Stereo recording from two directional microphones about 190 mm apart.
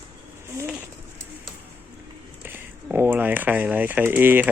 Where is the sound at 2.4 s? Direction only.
10° right (ahead or behind).